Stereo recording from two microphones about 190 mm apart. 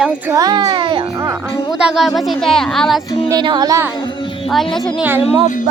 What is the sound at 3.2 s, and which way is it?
Speech, 20° right (ahead or behind).